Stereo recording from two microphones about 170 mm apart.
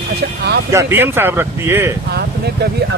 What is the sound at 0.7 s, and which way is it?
Speech, 15° right (ahead or behind).